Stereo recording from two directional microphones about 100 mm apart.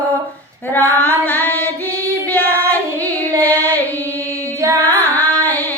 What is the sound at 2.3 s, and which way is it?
Child singing, 15° left (ahead or behind).